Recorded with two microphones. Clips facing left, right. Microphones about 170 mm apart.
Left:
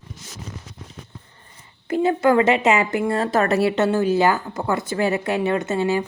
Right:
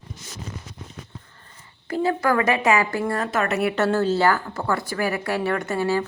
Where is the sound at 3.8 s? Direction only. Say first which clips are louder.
Left 2 dB; 15° left (ahead or behind).